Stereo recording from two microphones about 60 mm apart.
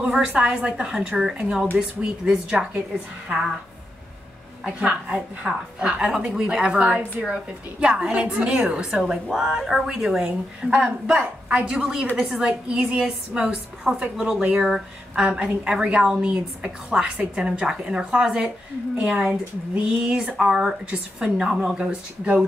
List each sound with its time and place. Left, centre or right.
0.1 s a woman's voice: centre
4.8 s a woman's voice: centre
8.9 s a woman's voice: centre